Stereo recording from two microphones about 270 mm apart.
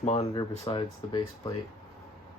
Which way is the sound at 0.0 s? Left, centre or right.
Left.